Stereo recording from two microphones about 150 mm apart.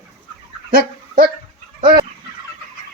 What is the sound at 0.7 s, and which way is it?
Dog, 75° right (ahead or behind).